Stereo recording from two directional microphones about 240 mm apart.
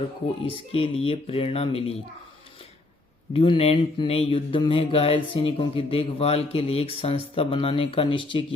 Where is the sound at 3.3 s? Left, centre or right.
Left.